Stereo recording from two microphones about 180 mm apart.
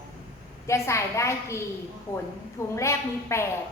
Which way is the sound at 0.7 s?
15° left (ahead or behind).